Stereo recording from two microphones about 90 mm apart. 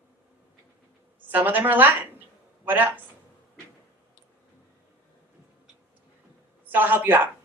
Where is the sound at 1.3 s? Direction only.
20° right (ahead or behind).